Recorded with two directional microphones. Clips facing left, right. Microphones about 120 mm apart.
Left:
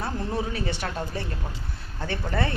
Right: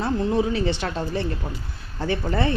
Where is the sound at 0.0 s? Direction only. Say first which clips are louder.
Right 7 dB; 25° right (ahead or behind).